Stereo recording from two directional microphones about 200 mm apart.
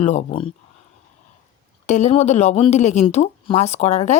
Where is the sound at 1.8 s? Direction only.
35° left (ahead or behind).